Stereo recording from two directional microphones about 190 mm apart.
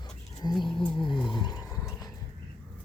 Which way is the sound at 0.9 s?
25° left (ahead or behind).